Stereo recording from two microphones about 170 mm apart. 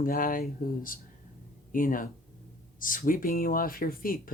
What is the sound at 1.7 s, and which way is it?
Speech, 50° left (ahead or behind).